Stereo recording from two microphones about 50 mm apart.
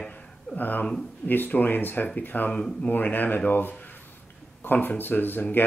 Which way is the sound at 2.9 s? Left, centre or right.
Left.